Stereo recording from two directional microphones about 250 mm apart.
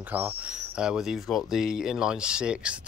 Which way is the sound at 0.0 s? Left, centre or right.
Centre.